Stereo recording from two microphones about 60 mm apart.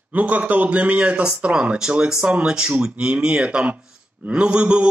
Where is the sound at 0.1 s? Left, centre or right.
Right.